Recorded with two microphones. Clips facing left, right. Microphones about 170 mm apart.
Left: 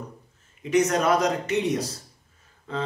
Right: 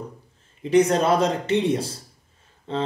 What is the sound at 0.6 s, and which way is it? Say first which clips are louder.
Speech: right 4 dB; 30° right (ahead or behind).